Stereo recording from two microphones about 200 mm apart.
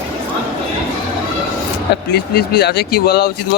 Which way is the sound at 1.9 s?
55° left (ahead or behind).